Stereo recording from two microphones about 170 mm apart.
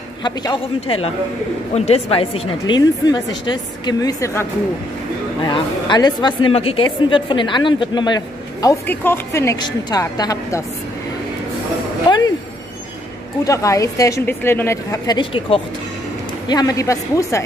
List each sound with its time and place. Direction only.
0.2 s speech: 25° left (ahead or behind)
13.4 s speech: 20° left (ahead or behind)